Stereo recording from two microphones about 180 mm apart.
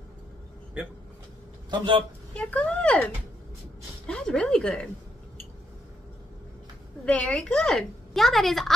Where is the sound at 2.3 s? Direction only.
10° left (ahead or behind).